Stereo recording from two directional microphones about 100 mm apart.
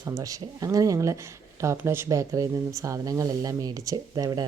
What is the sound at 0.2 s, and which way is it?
Speech, 35° right (ahead or behind).